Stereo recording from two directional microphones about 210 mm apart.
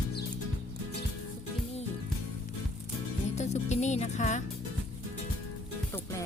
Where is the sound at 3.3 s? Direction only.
35° left (ahead or behind).